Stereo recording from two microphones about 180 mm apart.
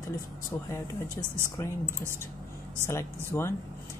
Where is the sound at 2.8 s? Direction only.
15° left (ahead or behind).